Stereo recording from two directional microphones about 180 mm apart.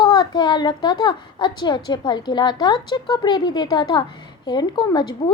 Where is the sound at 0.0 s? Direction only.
25° left (ahead or behind).